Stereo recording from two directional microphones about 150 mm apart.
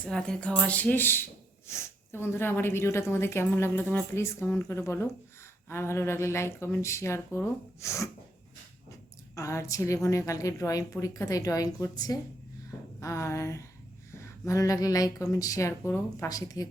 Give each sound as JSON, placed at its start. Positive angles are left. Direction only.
{"t": 0.1, "sound": "speech", "side_deg": 5}
{"t": 9.3, "sound": "a woman's voice", "side_deg": 20}